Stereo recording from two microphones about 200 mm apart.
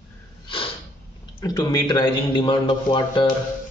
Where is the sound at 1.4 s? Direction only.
20° left (ahead or behind).